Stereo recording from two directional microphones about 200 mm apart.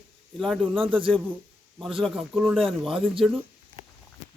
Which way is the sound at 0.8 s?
25° right (ahead or behind).